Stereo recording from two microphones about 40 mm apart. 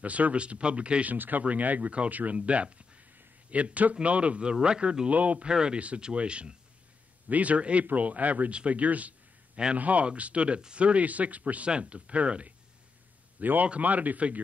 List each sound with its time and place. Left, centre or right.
0.0 s speech: right
1.0 s speech: right
1.4 s speech: right
2.3 s a man's voice: right
5.4 s a man's voice: right
7.2 s speech: right
13.4 s a man's voice: right